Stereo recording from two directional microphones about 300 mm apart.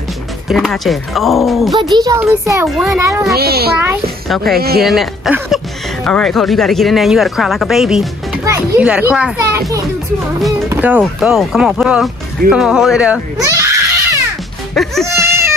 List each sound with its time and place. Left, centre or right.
0.5 s speech: centre
1.8 s a child's voice: centre
3.3 s a child's voice: right
4.8 s speech: centre
14.7 s music: centre
15.1 s a sound: centre